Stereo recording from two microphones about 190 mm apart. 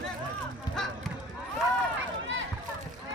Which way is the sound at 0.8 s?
Centre (ahead or behind).